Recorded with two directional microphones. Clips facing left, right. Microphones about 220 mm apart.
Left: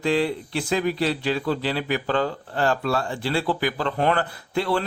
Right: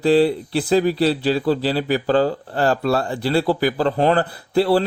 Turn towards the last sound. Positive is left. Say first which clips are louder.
# right 7 dB
turn(degrees=-35)  # may be behind; listen again after turning